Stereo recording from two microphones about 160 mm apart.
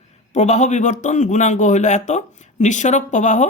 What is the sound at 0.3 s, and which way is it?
Speech, 45° left (ahead or behind).